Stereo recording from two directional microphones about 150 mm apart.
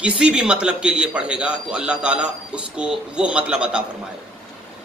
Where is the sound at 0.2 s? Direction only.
5° right (ahead or behind).